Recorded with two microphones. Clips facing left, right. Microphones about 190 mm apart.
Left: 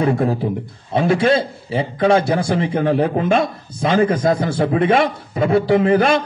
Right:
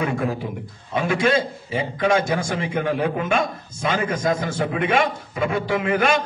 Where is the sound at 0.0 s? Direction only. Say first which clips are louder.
Left 6 dB; 35° left (ahead or behind).